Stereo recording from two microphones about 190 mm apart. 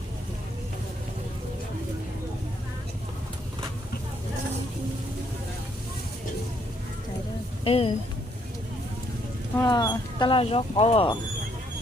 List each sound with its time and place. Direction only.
7.6 s speech: 30° left (ahead or behind)
9.6 s speech: 20° left (ahead or behind)